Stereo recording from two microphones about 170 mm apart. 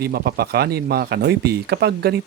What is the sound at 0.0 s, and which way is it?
Speech, 70° right (ahead or behind).